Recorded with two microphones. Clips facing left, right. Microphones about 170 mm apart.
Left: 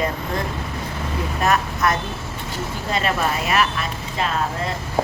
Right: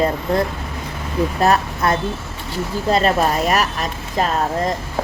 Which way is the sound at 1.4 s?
30° right (ahead or behind).